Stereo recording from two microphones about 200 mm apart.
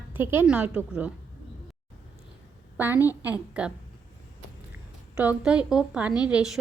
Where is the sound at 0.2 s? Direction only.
10° right (ahead or behind).